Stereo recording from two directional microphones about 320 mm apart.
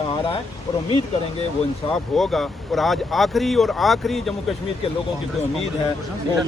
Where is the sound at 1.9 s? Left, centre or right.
Centre.